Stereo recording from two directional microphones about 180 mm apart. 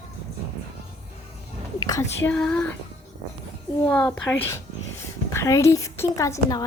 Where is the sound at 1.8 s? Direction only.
20° left (ahead or behind).